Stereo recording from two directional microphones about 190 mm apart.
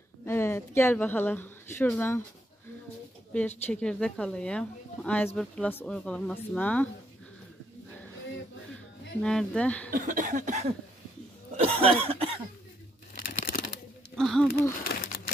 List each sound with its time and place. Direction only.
0.2 s speech: 10° left (ahead or behind)
3.3 s speech: 10° left (ahead or behind)
9.2 s speech: 5° left (ahead or behind)
9.8 s cough: 45° right (ahead or behind); by 12.3 s 30° right (ahead or behind)
13.2 s crumpling: 50° left (ahead or behind)
14.1 s speech: centre (ahead or behind)
14.8 s a sound: 50° left (ahead or behind)